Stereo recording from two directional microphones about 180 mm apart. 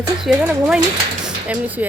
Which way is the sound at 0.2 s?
5° right (ahead or behind).